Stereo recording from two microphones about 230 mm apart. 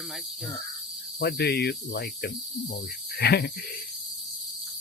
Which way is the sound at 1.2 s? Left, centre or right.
Left.